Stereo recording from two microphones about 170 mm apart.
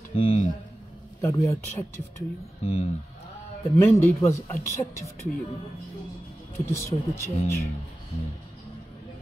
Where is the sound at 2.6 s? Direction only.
35° left (ahead or behind).